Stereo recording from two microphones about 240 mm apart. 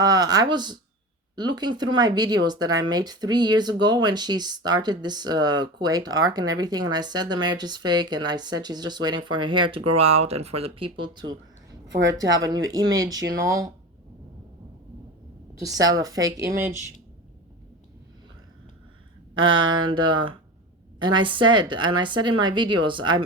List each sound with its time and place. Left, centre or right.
0.0 s speech: centre
11.9 s a woman's voice: right
12.4 s speech: centre
15.5 s speech: centre
19.4 s speech: centre